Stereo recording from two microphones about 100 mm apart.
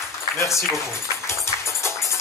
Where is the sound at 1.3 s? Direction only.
30° left (ahead or behind).